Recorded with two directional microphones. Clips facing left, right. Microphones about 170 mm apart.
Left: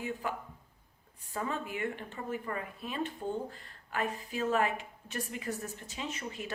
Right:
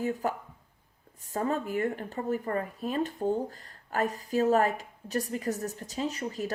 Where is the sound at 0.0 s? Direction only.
40° right (ahead or behind).